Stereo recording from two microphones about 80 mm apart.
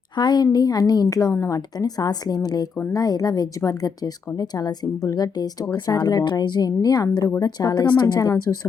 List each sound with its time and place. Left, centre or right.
0.2 s a woman's voice: left